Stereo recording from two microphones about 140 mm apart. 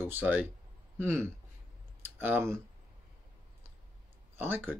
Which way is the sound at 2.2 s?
15° right (ahead or behind).